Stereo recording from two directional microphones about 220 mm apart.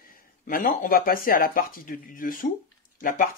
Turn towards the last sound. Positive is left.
turn(degrees=40)  # may be behind; listen again after turning